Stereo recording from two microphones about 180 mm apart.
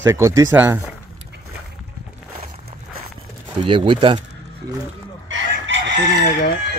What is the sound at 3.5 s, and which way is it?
Speech, 25° right (ahead or behind).